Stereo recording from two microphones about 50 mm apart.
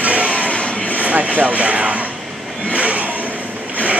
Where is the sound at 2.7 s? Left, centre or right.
Right.